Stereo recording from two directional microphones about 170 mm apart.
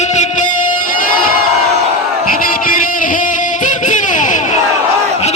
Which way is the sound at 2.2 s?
55° left (ahead or behind).